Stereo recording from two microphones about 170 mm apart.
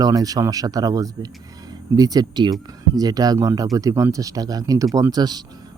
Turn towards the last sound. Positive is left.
turn(degrees=-25)  # may be behind; listen again after turning